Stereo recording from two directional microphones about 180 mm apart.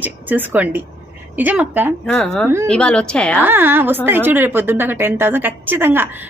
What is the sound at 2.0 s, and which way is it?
A woman's voice, 5° left (ahead or behind).